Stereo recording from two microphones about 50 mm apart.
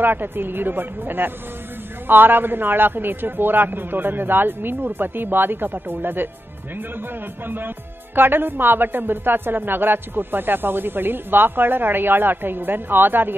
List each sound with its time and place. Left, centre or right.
0.0 s speech: right
7.4 s speech: right